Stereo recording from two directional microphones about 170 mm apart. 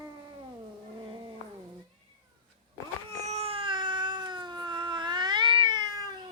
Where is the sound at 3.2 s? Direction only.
40° right (ahead or behind).